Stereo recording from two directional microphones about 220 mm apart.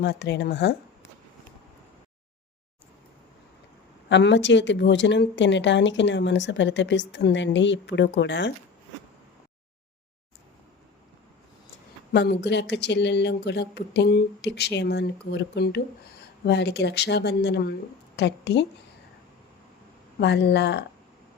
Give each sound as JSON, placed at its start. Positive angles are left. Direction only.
{"t": 0.0, "sound": "speech", "side_deg": 50}
{"t": 4.1, "sound": "speech", "side_deg": 55}
{"t": 12.1, "sound": "a woman's voice", "side_deg": 50}
{"t": 20.1, "sound": "speech", "side_deg": 50}